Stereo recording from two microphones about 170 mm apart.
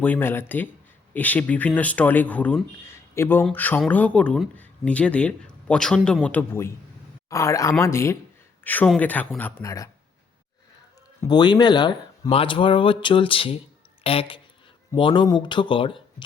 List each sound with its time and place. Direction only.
0.0 s speech: 10° left (ahead or behind)
11.2 s speech: 25° left (ahead or behind)